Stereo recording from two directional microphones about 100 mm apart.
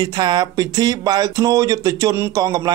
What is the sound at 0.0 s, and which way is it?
Speech, 45° right (ahead or behind).